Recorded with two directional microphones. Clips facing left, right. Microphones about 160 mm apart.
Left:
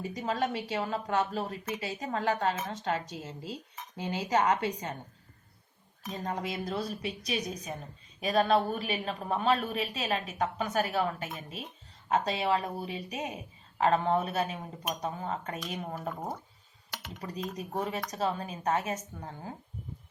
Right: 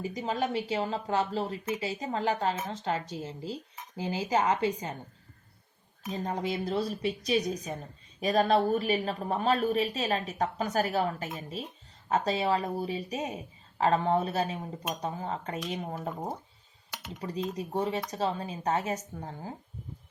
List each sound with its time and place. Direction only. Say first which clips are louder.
0.2 s a woman's voice: right 1 dB; 30° right (ahead or behind)
6.1 s a woman's voice: right 3 dB; 30° right (ahead or behind)
17.2 s a woman's voice: right 4 dB; 30° right (ahead or behind)